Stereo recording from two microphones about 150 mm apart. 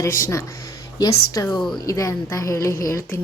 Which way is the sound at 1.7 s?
20° left (ahead or behind).